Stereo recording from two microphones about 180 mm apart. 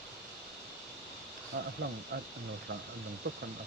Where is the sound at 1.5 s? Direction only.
90° right.